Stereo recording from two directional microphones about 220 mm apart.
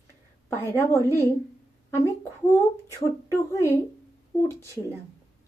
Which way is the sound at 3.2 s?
15° left (ahead or behind).